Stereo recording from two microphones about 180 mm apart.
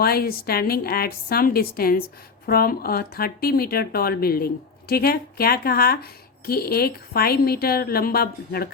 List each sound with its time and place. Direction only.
0.0 s speech: 60° left (ahead or behind)